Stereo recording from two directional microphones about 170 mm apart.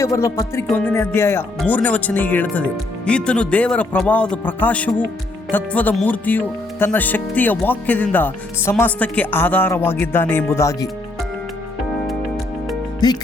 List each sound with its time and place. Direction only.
0.0 s speech: 15° left (ahead or behind)
13.0 s music: 25° left (ahead or behind)